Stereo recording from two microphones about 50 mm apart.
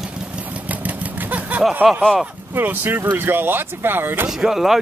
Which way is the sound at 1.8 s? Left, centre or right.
Right.